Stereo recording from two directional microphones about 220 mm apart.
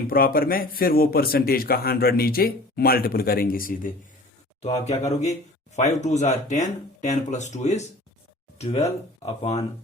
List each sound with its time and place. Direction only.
0.1 s a man's voice: 40° left (ahead or behind)
4.6 s speech: 30° left (ahead or behind)